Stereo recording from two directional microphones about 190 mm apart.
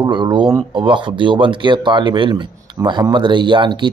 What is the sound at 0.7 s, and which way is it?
Speech, 25° right (ahead or behind).